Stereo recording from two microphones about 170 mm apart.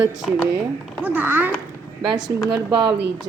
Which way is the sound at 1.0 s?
10° right (ahead or behind).